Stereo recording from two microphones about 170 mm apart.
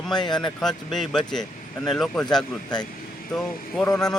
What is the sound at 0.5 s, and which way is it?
Speech, centre (ahead or behind).